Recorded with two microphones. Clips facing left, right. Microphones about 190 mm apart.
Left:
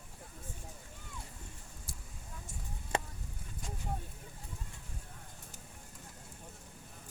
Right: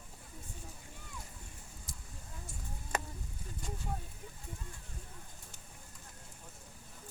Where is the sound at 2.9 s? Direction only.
30° left (ahead or behind).